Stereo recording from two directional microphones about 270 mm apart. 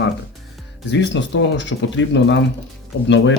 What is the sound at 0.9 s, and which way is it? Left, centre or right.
Speech, left.